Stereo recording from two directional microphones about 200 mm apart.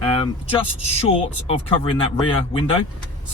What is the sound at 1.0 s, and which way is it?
Speech, 30° left (ahead or behind).